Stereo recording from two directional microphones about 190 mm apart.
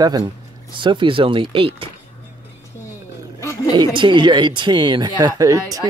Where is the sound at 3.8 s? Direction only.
25° right (ahead or behind).